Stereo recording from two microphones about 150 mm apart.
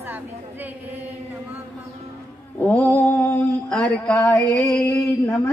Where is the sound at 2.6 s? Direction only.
10° left (ahead or behind).